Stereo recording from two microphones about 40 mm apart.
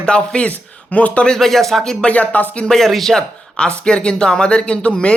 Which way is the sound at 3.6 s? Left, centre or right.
Left.